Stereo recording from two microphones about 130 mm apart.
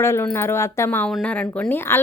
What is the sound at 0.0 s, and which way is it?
A woman's voice, 20° left (ahead or behind).